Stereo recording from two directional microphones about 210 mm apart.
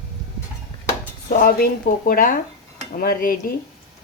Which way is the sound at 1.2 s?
45° left (ahead or behind).